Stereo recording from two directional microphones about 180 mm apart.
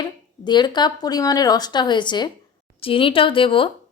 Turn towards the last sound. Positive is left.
turn(degrees=30)  # may be behind; listen again after turning